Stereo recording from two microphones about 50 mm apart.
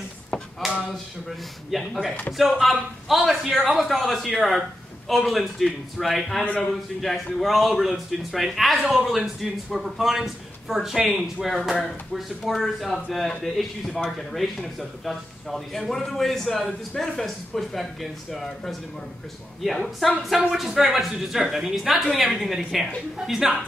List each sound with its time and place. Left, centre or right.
0.6 s a sound: centre
1.7 s speech: centre
6.4 s a man's voice: left
6.7 s speech: centre